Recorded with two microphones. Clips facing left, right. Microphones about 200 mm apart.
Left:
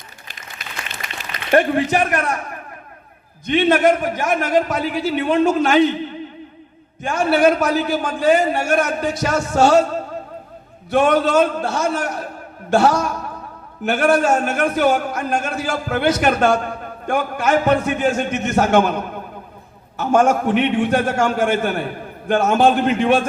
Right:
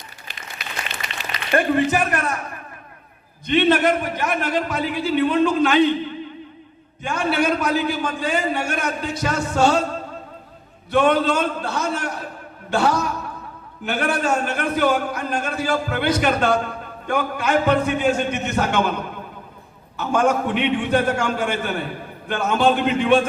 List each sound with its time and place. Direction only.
0.9 s a sound: 45° left (ahead or behind)
3.4 s a man's voice: 50° left (ahead or behind)
7.1 s a man's voice: 45° left (ahead or behind)
10.9 s a man's voice: 45° left (ahead or behind)